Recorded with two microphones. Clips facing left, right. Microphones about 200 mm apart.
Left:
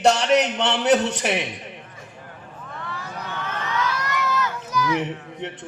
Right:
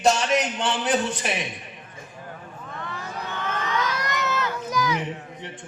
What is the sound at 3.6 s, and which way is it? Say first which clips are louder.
Crowd: left 2 dB; 20° right (ahead or behind).